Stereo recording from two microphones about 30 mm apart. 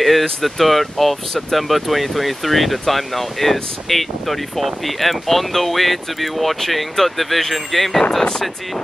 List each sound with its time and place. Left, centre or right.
0.0 s speech: centre